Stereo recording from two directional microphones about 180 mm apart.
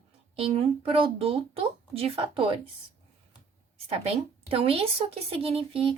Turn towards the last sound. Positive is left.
turn(degrees=-30)  # may be behind; listen again after turning